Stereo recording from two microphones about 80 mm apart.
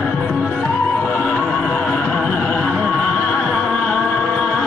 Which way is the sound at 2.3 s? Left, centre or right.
Centre.